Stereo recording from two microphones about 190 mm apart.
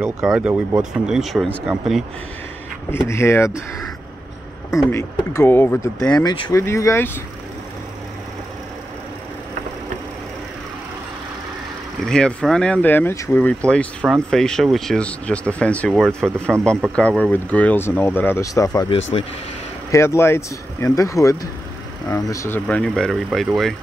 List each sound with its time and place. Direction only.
0.0 s speech: 5° right (ahead or behind)
2.9 s speech: 15° left (ahead or behind)
4.9 s speech: 15° left (ahead or behind)
12.0 s speech: 5° left (ahead or behind)